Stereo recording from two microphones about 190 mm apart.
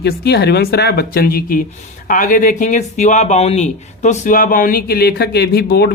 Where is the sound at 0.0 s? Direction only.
60° left (ahead or behind).